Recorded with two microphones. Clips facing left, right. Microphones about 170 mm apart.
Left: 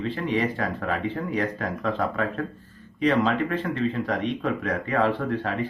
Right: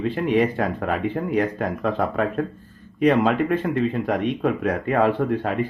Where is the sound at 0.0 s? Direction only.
55° right (ahead or behind).